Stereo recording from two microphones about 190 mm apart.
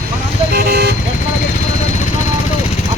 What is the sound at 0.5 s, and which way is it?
Speech, 55° right (ahead or behind).